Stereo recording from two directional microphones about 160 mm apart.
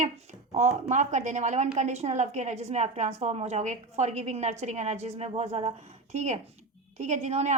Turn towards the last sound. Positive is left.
turn(degrees=-45)  # may be behind; listen again after turning